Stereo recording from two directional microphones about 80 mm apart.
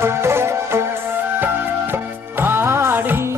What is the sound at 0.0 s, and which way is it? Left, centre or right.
Music, right.